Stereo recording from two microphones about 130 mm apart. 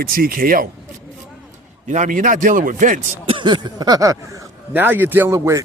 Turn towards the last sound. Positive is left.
turn(degrees=-25)  # may be behind; listen again after turning